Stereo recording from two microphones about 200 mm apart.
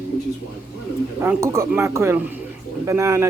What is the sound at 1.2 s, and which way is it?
Speech, 15° right (ahead or behind).